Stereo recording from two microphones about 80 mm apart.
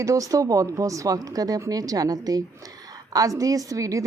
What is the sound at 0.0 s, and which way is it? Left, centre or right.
A woman's voice, right.